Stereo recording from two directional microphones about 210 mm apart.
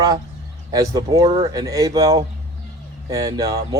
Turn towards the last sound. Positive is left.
turn(degrees=-15)  # may be behind; listen again after turning